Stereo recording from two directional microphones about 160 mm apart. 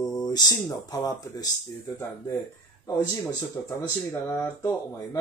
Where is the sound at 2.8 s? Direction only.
20° left (ahead or behind).